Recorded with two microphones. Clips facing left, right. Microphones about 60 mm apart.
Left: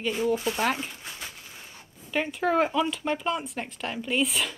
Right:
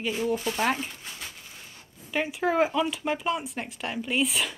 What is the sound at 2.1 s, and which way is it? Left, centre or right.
Speech, centre.